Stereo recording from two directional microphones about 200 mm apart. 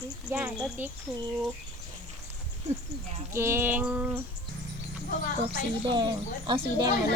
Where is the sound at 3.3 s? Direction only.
10° right (ahead or behind).